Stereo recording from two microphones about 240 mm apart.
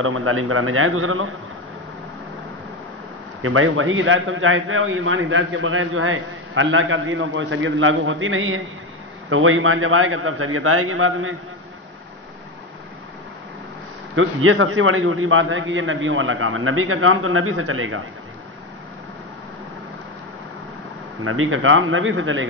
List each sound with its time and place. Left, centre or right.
0.0 s a man's voice: right
3.4 s a man's voice: right
14.1 s a man's voice: right
21.2 s a man's voice: right